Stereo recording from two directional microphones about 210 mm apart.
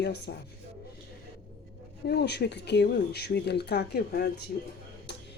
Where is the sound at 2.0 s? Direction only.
50° left (ahead or behind).